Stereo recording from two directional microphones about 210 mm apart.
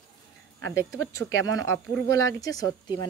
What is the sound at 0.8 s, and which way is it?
A woman's voice, 15° left (ahead or behind).